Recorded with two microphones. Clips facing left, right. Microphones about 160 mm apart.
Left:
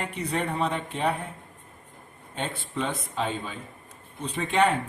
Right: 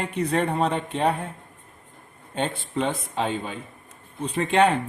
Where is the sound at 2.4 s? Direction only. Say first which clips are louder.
Right 5 dB; 55° right (ahead or behind).